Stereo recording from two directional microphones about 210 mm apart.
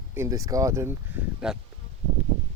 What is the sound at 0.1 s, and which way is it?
Speech, 15° right (ahead or behind).